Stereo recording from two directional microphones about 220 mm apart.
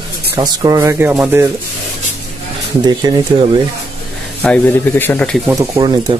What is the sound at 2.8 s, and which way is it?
Speech, 20° right (ahead or behind).